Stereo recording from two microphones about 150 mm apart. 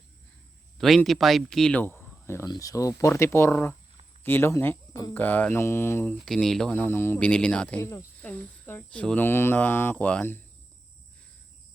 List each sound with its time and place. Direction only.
0.8 s speech: centre (ahead or behind)
6.2 s speech: 5° left (ahead or behind)
7.8 s speech: 20° left (ahead or behind)
8.2 s speech: 10° left (ahead or behind)